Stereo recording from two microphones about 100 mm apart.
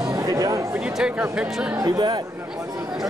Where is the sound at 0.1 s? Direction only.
35° right (ahead or behind).